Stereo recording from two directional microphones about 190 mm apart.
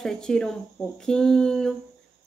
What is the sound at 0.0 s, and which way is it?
Speech, 5° left (ahead or behind).